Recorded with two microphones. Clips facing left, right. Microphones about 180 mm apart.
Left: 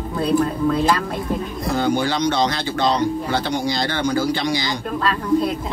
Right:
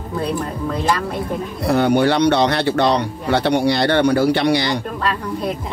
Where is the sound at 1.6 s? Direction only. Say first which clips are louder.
Right 6 dB; 65° right (ahead or behind).